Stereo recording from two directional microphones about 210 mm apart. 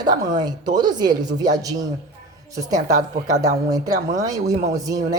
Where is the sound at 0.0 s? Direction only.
20° right (ahead or behind).